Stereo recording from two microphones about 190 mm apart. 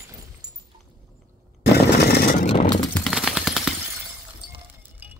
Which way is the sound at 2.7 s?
5° left (ahead or behind).